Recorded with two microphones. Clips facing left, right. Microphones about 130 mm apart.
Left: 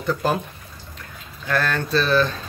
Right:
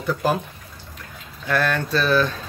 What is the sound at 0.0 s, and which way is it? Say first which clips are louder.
Speech: even; 5° right (ahead or behind).